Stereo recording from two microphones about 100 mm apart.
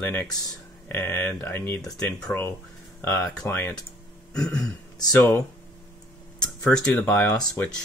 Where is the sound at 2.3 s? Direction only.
20° left (ahead or behind).